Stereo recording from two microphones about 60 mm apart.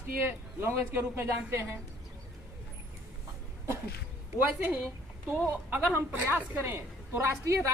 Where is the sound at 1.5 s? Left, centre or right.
Right.